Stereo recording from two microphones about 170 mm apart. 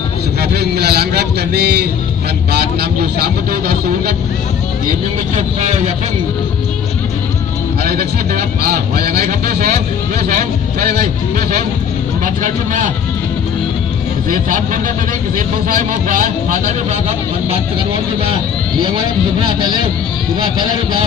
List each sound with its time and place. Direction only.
0.4 s speech: 70° right (ahead or behind)
5.3 s a man's voice: 40° right (ahead or behind)
8.9 s a man's voice: 65° right (ahead or behind)
12.4 s a man's voice: 45° right (ahead or behind)
15.3 s a man's voice: 50° right (ahead or behind)